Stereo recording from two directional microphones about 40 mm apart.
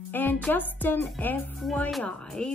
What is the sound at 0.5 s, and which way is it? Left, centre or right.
Speech, left.